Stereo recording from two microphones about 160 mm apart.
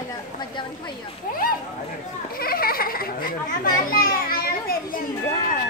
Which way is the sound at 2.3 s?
70° left (ahead or behind).